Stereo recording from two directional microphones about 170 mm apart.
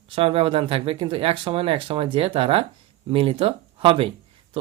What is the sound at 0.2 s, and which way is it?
Speech, 35° right (ahead or behind).